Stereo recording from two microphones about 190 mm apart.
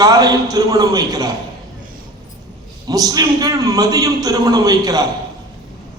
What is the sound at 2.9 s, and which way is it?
A man's voice, 20° right (ahead or behind).